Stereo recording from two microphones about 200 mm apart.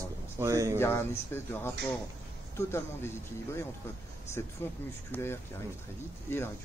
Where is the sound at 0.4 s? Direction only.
15° right (ahead or behind).